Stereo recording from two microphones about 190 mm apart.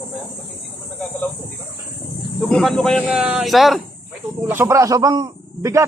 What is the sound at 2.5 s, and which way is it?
Speech, 5° left (ahead or behind).